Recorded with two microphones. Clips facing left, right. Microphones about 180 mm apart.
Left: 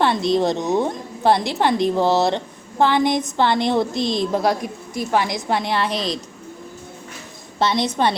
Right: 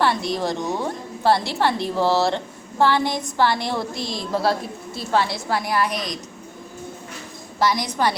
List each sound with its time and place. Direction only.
0.0 s a woman's voice: 20° left (ahead or behind)
7.6 s a woman's voice: 25° left (ahead or behind)